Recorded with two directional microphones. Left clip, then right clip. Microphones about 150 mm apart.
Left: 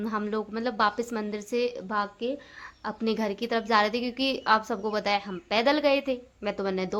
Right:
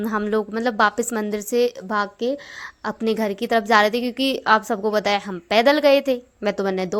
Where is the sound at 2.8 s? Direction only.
40° right (ahead or behind).